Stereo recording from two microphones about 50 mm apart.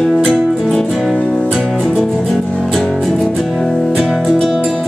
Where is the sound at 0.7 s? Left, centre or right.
Centre.